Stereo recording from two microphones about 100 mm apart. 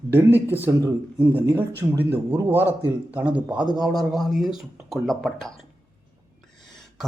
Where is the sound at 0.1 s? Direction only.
20° right (ahead or behind).